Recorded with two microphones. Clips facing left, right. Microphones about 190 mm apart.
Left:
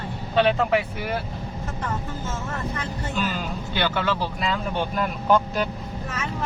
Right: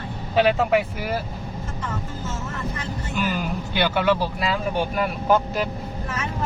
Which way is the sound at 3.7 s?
10° right (ahead or behind).